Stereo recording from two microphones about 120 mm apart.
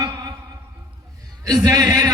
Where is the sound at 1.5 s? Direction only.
30° right (ahead or behind).